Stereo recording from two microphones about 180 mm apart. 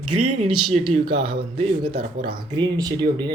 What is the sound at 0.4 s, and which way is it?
Speech, 30° right (ahead or behind).